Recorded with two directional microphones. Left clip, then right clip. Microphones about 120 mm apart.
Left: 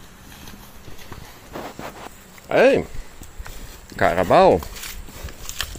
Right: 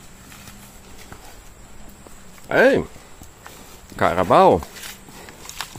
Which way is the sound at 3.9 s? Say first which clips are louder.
Even; 25° right (ahead or behind).